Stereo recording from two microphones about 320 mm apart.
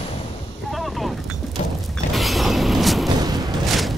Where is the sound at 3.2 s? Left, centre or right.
Centre.